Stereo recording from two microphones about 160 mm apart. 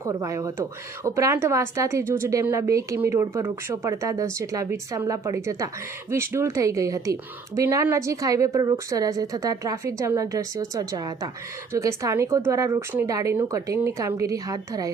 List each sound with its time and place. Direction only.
0.0 s a woman's voice: 20° right (ahead or behind)